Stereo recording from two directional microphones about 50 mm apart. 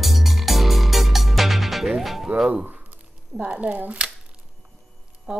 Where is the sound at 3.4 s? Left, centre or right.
Right.